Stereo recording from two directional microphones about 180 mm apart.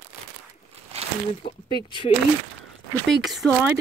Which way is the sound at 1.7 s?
25° left (ahead or behind).